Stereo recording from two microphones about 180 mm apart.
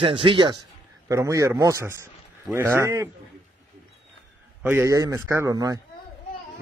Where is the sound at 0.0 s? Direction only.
30° right (ahead or behind).